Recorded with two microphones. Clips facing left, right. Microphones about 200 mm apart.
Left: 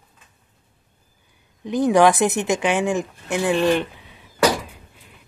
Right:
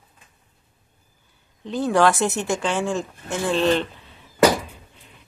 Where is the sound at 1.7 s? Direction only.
15° left (ahead or behind).